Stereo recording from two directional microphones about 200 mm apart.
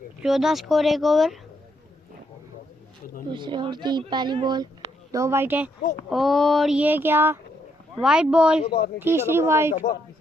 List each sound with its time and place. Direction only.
0.2 s speech: centre (ahead or behind)
3.2 s speech: 25° right (ahead or behind)
9.7 s speech: 45° left (ahead or behind)